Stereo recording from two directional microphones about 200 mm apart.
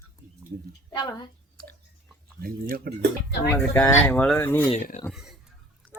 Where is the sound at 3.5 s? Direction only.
15° left (ahead or behind).